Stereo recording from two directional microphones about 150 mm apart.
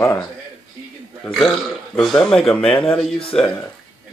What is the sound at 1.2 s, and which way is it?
Speech, centre (ahead or behind).